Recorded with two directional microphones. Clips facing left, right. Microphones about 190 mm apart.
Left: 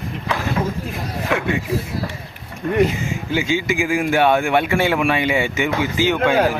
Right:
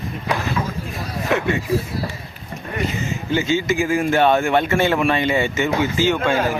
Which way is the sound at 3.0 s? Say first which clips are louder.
Right 1 dB; 15° left (ahead or behind).